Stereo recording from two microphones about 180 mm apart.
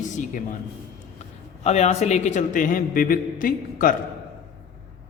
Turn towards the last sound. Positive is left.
turn(degrees=50)  # may be behind; listen again after turning